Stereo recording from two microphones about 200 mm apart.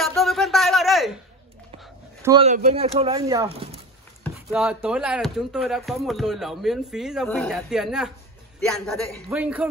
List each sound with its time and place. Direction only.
0.2 s a sound: centre (ahead or behind)
2.4 s speech: 35° right (ahead or behind)
4.5 s speech: 5° right (ahead or behind)